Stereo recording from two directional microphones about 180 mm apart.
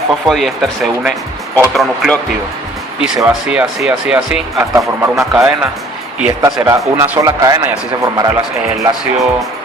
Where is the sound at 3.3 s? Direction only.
5° right (ahead or behind); by 8.3 s 20° right (ahead or behind).